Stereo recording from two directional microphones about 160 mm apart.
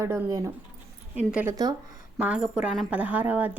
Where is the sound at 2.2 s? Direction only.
10° right (ahead or behind).